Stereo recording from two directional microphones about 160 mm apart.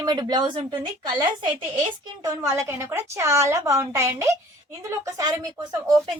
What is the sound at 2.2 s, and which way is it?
A woman's voice, 20° right (ahead or behind).